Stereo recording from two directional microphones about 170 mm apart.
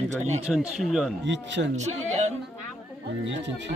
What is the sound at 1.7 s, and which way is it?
Speech, 45° right (ahead or behind).